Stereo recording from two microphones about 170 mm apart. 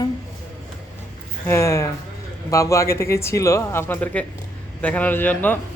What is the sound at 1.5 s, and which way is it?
Speech, 15° left (ahead or behind).